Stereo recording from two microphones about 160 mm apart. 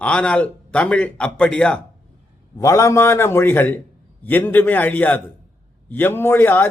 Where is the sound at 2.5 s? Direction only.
20° left (ahead or behind).